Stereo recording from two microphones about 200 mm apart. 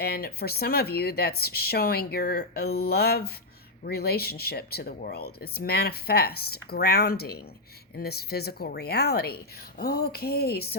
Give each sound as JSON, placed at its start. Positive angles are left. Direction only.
{"t": 0.0, "sound": "speech", "side_deg": 50}